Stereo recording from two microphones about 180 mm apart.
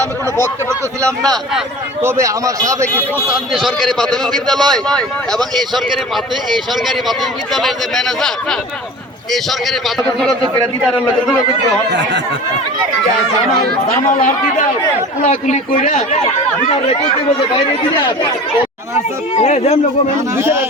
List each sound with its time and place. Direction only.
0.3 s speech: 15° left (ahead or behind)
1.2 s a man's voice: centre (ahead or behind)
2.0 s a man's voice: 15° right (ahead or behind); by 5.8 s centre (ahead or behind)
6.8 s a man's voice: centre (ahead or behind)
11.9 s speech: 80° right
14.1 s a man's voice: 45° left (ahead or behind)
19.4 s speech: 35° left (ahead or behind)
20.3 s a man's voice: 15° right (ahead or behind)